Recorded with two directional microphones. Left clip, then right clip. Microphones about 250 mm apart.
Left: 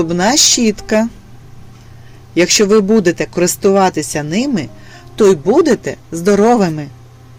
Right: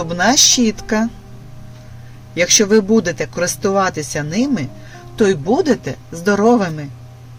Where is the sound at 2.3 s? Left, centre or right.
Left.